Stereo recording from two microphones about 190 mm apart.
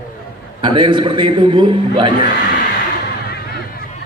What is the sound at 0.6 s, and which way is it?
A man's voice, 25° right (ahead or behind).